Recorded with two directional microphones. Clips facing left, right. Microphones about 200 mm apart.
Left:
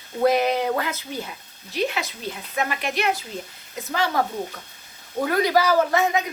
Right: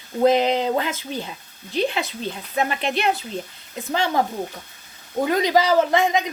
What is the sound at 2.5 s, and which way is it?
A woman's voice, 30° right (ahead or behind).